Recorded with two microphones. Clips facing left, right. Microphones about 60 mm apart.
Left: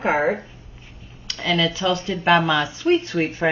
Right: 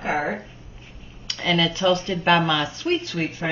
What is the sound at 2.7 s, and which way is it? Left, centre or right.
Speech, left.